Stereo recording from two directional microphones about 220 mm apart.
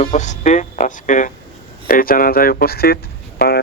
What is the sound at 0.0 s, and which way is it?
Speech, 30° left (ahead or behind).